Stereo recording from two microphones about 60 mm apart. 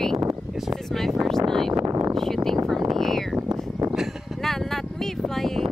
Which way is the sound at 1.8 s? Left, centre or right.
Right.